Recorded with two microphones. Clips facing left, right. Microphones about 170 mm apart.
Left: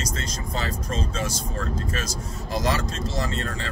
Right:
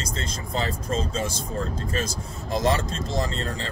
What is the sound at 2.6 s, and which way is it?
Speech, 30° right (ahead or behind).